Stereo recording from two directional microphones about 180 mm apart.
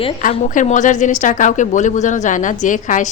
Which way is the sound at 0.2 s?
45° left (ahead or behind).